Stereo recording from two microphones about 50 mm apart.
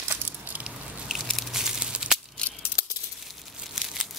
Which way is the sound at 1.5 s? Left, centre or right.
Centre.